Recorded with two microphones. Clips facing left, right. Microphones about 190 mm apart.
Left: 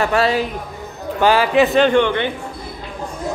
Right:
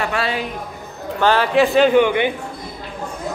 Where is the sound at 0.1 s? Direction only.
40° left (ahead or behind).